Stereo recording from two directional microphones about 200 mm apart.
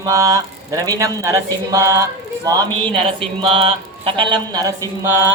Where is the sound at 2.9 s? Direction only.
30° right (ahead or behind).